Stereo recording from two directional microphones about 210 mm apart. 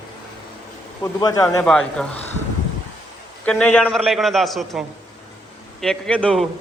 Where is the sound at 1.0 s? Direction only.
15° left (ahead or behind).